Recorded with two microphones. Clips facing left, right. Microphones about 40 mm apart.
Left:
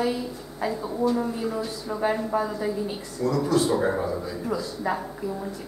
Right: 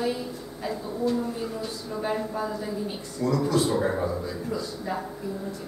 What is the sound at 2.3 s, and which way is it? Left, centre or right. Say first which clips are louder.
Speech: left 5 dB; left.